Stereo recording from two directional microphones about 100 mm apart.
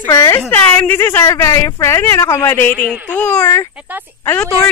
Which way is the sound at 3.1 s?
15° left (ahead or behind).